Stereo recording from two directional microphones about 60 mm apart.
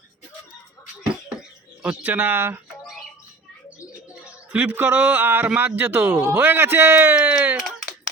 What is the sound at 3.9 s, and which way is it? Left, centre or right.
Bird, right.